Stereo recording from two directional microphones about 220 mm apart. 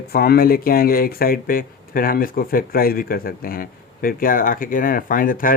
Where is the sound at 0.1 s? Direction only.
45° left (ahead or behind).